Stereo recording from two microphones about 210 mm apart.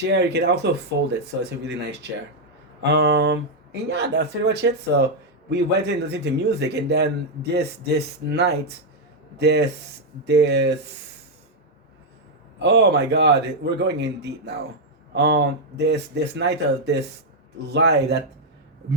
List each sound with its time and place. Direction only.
0.1 s speech: 55° right (ahead or behind)
2.8 s speech: 55° right (ahead or behind)
12.5 s speech: 55° right (ahead or behind)